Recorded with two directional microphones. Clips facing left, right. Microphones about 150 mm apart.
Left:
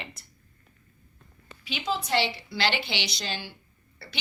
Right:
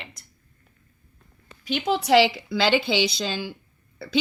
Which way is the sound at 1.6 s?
50° right (ahead or behind).